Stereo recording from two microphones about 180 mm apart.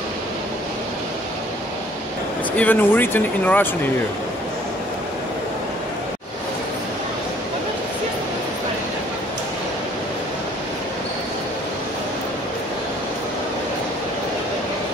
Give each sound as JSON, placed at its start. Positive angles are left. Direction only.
{"t": 2.5, "sound": "speech", "side_deg": 10}